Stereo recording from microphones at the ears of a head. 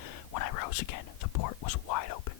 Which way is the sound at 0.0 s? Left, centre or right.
Left.